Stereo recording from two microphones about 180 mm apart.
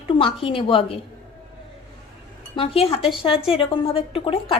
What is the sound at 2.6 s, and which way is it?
A woman's voice, 30° left (ahead or behind).